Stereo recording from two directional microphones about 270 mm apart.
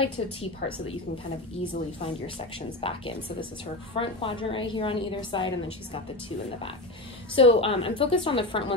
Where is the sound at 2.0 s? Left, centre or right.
Centre.